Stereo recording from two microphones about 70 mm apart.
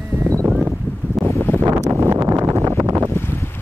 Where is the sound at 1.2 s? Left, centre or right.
Centre.